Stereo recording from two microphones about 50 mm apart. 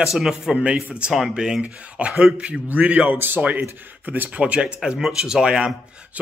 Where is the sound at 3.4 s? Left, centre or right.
Right.